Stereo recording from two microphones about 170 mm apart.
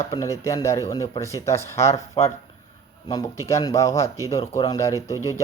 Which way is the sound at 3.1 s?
20° left (ahead or behind).